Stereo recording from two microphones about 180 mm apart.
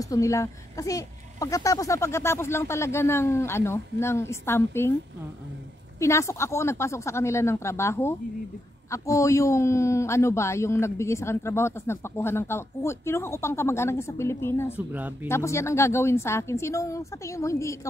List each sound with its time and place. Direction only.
0.0 s a man's voice: 20° left (ahead or behind)
5.9 s a man's voice: 15° left (ahead or behind)
14.9 s speech: 10° right (ahead or behind)
15.2 s a man's voice: 15° left (ahead or behind)